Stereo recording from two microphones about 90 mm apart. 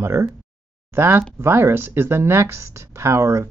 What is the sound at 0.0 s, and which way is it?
Speech, 30° right (ahead or behind).